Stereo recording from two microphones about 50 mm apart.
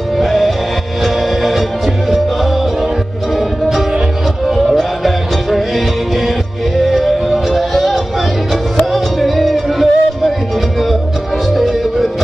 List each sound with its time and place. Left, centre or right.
0.2 s music: centre
3.3 s music: centre
6.8 s music: centre
11.5 s music: centre